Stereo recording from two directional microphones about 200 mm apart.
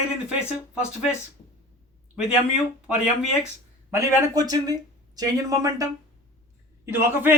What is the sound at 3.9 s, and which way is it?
Speech, 15° right (ahead or behind).